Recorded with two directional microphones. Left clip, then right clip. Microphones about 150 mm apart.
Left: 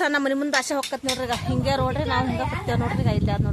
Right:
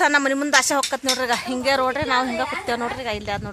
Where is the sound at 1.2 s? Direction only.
35° right (ahead or behind); by 3.5 s 50° right (ahead or behind).